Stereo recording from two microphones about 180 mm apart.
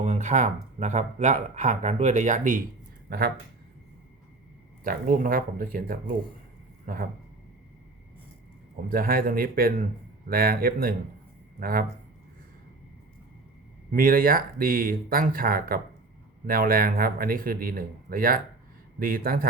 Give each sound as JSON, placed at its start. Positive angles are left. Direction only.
{"t": 0.0, "sound": "speech", "side_deg": -40}
{"t": 3.1, "sound": "speech", "side_deg": -60}
{"t": 4.8, "sound": "speech", "side_deg": -50}
{"t": 8.7, "sound": "speech", "side_deg": -50}
{"t": 13.9, "sound": "speech", "side_deg": -50}